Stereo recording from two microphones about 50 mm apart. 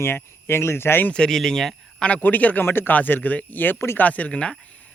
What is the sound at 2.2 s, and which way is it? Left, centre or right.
Speech, left.